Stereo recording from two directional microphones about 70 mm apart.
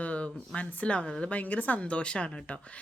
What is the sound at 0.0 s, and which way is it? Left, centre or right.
Speech, centre.